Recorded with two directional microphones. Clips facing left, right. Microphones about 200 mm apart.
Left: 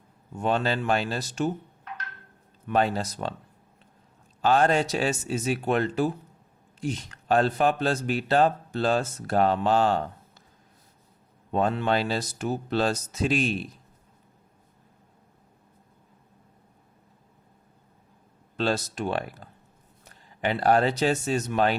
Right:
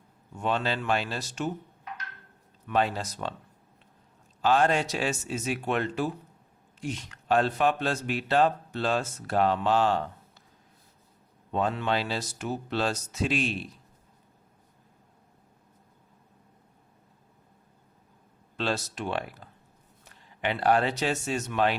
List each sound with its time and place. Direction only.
0.3 s speech: 45° left (ahead or behind)
2.6 s speech: 45° left (ahead or behind)
4.4 s speech: 45° left (ahead or behind)
11.5 s speech: 45° left (ahead or behind)
18.5 s speech: 40° left (ahead or behind)